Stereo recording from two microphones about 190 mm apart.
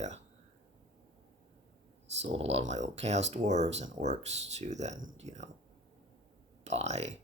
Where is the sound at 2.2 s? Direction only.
35° right (ahead or behind).